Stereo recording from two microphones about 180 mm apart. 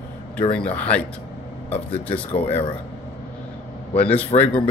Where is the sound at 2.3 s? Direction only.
35° left (ahead or behind).